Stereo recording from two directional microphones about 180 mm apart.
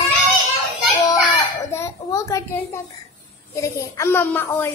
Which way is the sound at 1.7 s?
15° left (ahead or behind).